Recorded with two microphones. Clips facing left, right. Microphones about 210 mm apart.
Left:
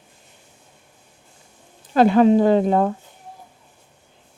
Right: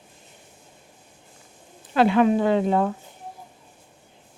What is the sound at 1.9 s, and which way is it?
Speech, 40° left (ahead or behind).